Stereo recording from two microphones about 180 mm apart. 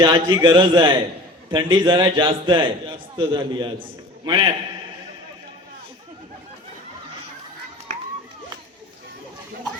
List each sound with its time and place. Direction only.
0.0 s a man's voice: 25° right (ahead or behind)